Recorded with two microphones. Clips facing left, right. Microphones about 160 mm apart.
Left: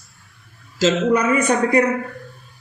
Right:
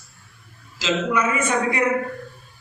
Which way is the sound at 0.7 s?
45° left (ahead or behind).